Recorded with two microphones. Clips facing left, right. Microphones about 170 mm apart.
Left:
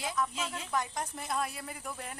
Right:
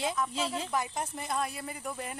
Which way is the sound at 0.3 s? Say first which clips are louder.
Right 5 dB; 30° right (ahead or behind).